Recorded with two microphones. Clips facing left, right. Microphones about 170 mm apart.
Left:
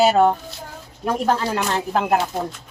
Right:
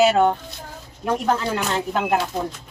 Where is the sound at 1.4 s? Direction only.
35° left (ahead or behind).